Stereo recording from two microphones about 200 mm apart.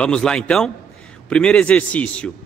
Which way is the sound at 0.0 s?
5° left (ahead or behind).